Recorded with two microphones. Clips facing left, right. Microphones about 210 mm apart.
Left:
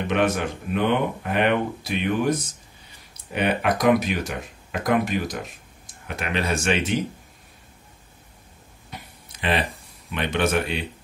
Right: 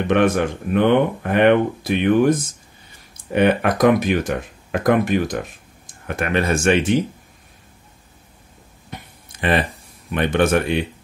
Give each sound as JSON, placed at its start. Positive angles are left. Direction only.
{"t": 0.1, "sound": "speech", "side_deg": -55}
{"t": 9.3, "sound": "speech", "side_deg": -50}